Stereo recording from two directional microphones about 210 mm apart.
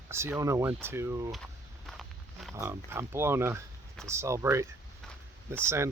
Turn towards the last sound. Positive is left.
turn(degrees=-10)  # may be behind; listen again after turning